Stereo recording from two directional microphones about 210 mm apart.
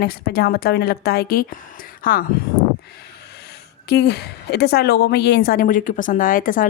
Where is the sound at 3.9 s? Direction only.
50° left (ahead or behind).